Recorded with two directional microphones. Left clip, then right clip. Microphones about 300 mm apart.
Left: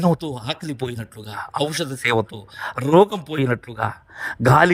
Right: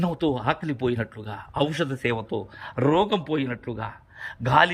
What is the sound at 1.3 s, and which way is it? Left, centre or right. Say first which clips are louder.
A man's voice: left 3 dB; left.